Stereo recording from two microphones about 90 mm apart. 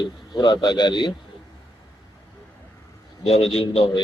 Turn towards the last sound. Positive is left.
turn(degrees=90)